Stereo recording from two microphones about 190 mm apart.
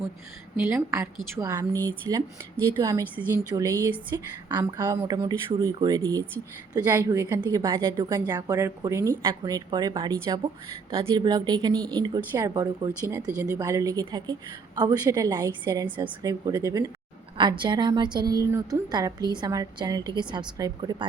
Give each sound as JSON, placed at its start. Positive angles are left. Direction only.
{"t": 0.5, "sound": "a woman's voice", "side_deg": -10}